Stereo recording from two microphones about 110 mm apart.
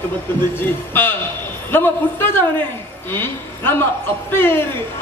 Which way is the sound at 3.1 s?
20° left (ahead or behind).